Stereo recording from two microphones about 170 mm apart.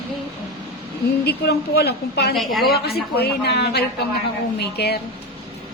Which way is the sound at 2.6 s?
65° left (ahead or behind).